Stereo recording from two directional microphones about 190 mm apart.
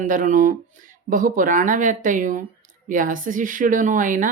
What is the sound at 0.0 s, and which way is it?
Speech, 45° right (ahead or behind).